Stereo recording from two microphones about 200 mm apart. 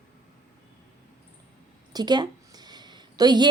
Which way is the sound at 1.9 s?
20° right (ahead or behind).